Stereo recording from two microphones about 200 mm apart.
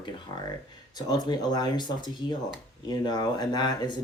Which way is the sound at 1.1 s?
20° left (ahead or behind).